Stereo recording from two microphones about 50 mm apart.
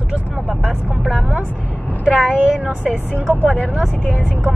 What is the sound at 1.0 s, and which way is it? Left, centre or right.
Speech, right.